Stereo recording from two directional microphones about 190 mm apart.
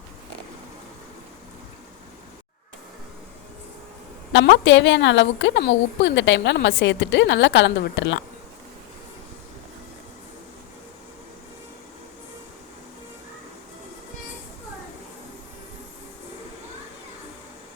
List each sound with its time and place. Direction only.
4.5 s a woman's voice: 75° left (ahead or behind)